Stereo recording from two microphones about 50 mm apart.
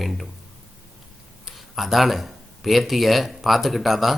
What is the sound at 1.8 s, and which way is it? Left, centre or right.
Speech, centre.